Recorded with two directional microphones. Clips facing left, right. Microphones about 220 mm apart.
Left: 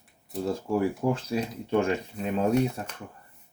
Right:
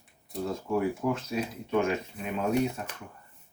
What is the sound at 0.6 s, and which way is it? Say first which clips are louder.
Speech: left 2 dB; 30° left (ahead or behind).